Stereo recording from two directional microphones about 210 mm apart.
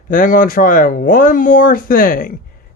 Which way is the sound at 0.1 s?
40° left (ahead or behind).